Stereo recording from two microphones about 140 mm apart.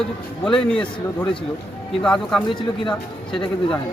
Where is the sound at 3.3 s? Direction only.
40° left (ahead or behind).